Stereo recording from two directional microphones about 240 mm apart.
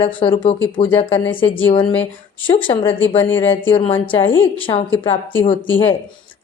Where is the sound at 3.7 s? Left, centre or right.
Left.